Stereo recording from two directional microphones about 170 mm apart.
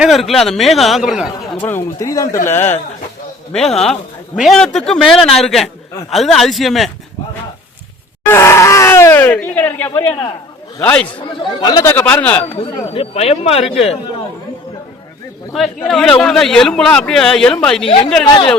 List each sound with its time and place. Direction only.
0.0 s a man's voice: centre (ahead or behind)
1.6 s a man's voice: 15° left (ahead or behind); by 6.9 s centre (ahead or behind)
8.3 s speech: 15° left (ahead or behind)
10.1 s speech: 30° left (ahead or behind)
10.8 s speech: 10° left (ahead or behind)
11.4 s speech: 25° left (ahead or behind)
12.5 s speech: 35° left (ahead or behind)
15.5 s a man's voice: centre (ahead or behind)
17.8 s speech: 35° left (ahead or behind)